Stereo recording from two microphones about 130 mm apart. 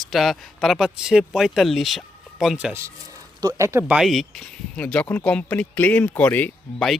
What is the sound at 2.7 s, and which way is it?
Speech, 20° right (ahead or behind).